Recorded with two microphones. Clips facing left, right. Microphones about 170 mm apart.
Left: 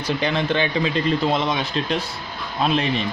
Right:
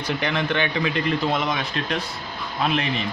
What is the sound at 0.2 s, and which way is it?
A man's voice, 30° left (ahead or behind).